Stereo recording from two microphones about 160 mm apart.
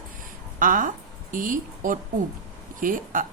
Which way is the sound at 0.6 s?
55° right (ahead or behind).